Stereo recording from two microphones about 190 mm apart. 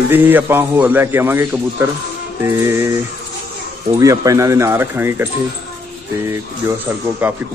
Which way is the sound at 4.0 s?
15° right (ahead or behind).